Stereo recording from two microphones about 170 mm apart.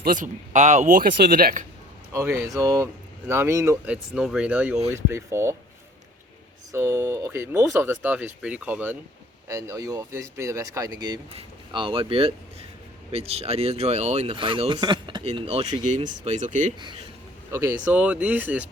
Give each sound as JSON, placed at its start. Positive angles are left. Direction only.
{"t": 0.0, "sound": "speech", "side_deg": -50}
{"t": 2.1, "sound": "speech", "side_deg": -15}
{"t": 3.9, "sound": "speech", "side_deg": -5}
{"t": 6.7, "sound": "speech", "side_deg": -15}
{"t": 17.5, "sound": "speech", "side_deg": -10}